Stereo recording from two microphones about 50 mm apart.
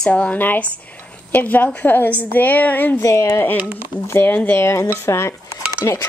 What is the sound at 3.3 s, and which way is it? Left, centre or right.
A woman's voice, left.